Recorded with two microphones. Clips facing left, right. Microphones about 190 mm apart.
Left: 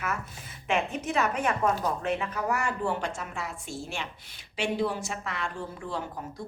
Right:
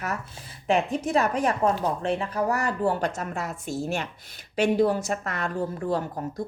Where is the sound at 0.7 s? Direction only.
35° right (ahead or behind).